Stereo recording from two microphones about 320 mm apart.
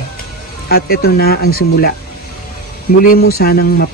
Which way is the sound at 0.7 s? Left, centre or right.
Left.